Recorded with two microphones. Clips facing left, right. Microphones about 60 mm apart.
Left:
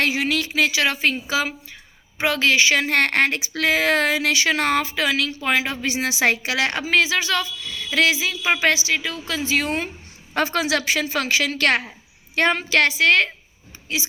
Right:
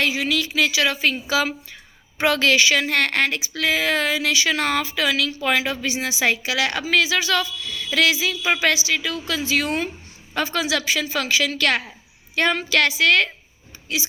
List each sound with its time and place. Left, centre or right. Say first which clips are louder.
0.0 s a woman's voice: even; left
1.1 s a woman's voice: right 1 dB; left
5.9 s a woman's voice: left 3 dB; left
6.3 s a woman's voice: even; left
10.3 s a woman's voice: left 2 dB; left